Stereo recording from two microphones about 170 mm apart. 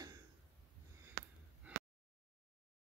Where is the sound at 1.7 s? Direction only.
10° right (ahead or behind).